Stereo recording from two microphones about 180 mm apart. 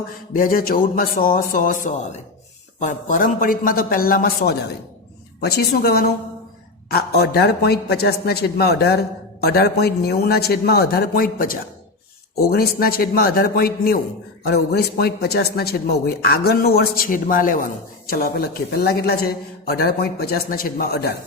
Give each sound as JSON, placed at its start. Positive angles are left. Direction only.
{"t": 0.3, "sound": "a man's voice", "side_deg": 50}